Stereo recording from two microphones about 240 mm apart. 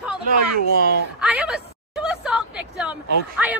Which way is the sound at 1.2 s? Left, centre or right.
Centre.